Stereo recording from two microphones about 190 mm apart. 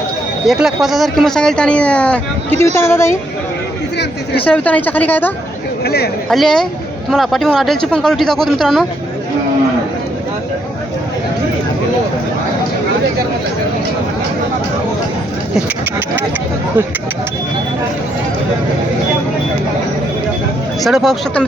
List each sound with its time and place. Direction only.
0.4 s a woman's voice: centre (ahead or behind)
3.9 s speech: 60° left (ahead or behind)
4.4 s a woman's voice: 10° left (ahead or behind)
5.8 s speech: 55° left (ahead or behind)
6.2 s speech: centre (ahead or behind)
20.8 s speech: centre (ahead or behind)